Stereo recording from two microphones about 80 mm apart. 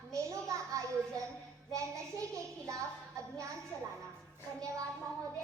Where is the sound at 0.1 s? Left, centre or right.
Right.